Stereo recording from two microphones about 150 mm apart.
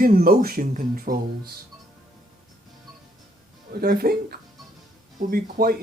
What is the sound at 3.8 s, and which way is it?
Speech, 85° right.